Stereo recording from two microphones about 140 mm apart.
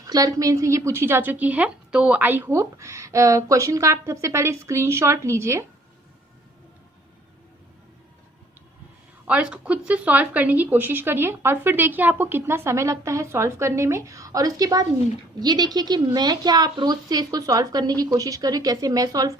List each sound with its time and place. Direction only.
0.0 s a woman's voice: 25° right (ahead or behind)
9.2 s a woman's voice: 10° right (ahead or behind); by 19.4 s 25° right (ahead or behind)